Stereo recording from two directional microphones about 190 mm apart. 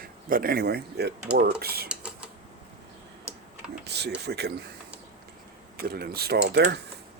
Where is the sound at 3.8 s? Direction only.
60° right (ahead or behind).